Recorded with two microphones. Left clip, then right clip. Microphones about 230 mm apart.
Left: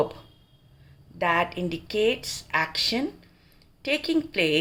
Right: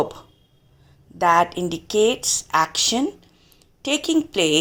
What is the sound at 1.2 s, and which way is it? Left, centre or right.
A woman's voice, right.